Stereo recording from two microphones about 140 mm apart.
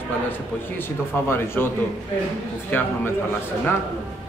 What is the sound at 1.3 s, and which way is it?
Speech, 15° left (ahead or behind).